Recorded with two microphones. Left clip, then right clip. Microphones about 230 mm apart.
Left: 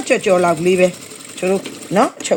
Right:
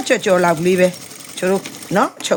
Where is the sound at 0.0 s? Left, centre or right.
Right.